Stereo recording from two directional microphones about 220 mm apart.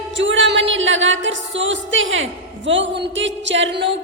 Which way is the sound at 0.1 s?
55° right (ahead or behind).